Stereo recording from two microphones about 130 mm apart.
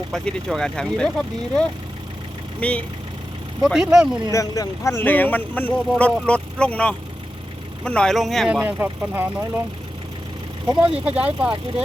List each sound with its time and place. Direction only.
0.1 s speech: 5° left (ahead or behind)
3.6 s speech: 5° right (ahead or behind)
4.3 s speech: 25° left (ahead or behind); by 8.6 s centre (ahead or behind)
8.6 s speech: 15° right (ahead or behind)
10.9 s speech: 10° right (ahead or behind)